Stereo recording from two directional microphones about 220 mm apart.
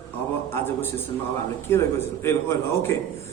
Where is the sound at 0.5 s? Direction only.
10° left (ahead or behind).